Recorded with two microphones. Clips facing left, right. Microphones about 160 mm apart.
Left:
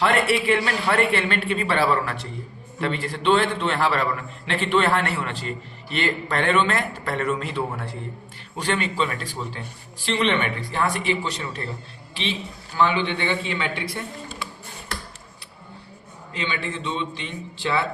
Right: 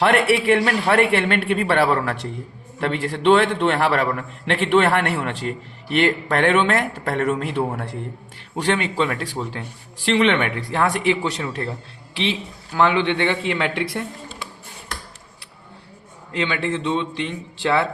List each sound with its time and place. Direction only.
0.0 s a man's voice: 65° right (ahead or behind); by 14.0 s 80° right
16.3 s a man's voice: 75° right (ahead or behind)